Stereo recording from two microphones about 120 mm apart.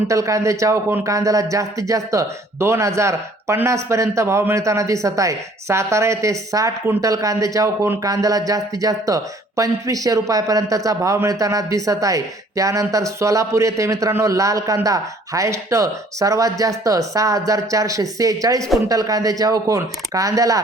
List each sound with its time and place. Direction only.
0.1 s speech: 25° right (ahead or behind)